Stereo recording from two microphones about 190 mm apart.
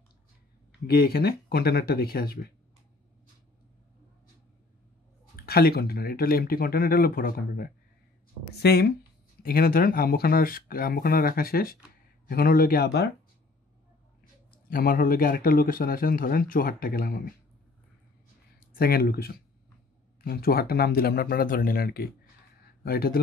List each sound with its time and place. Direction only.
0.8 s speech: 50° left (ahead or behind)
5.3 s speech: 55° left (ahead or behind)
14.7 s speech: 50° left (ahead or behind)
18.7 s speech: 50° left (ahead or behind)